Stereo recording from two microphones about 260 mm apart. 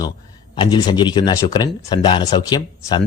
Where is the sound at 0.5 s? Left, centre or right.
Centre.